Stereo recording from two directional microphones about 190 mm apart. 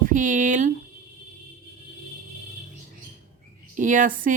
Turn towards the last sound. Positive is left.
turn(degrees=-45)  # may be behind; listen again after turning